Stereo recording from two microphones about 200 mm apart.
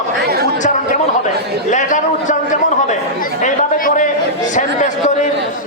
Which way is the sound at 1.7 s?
40° left (ahead or behind).